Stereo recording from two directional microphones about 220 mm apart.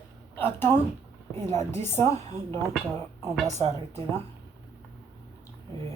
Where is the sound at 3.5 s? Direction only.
25° right (ahead or behind).